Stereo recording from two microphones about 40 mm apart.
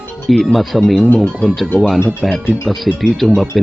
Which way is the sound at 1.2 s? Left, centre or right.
Left.